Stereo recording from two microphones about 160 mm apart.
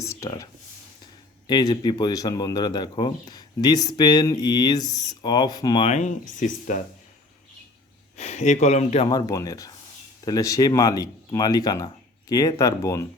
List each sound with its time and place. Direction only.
0.0 s speech: 20° left (ahead or behind)
1.5 s speech: 25° left (ahead or behind)
5.8 s speech: 45° left (ahead or behind)
8.1 s speech: 45° left (ahead or behind)
9.0 s speech: 25° left (ahead or behind)